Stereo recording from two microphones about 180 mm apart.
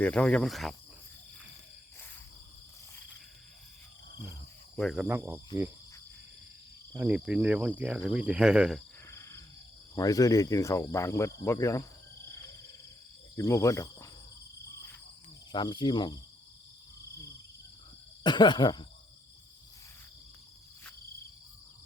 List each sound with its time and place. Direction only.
0.0 s speech: 5° left (ahead or behind)
4.8 s speech: centre (ahead or behind)
5.0 s cricket: 15° right (ahead or behind)
6.9 s cricket: 10° right (ahead or behind)
7.8 s speech: 5° right (ahead or behind)
9.0 s a sound: 15° left (ahead or behind)
9.9 s speech: 20° left (ahead or behind)
13.3 s cricket: 15° left (ahead or behind)
15.5 s speech: 25° left (ahead or behind)
18.2 s speech: 25° left (ahead or behind)